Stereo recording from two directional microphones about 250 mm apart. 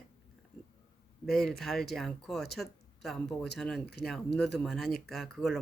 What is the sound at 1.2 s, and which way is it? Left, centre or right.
Speech, centre.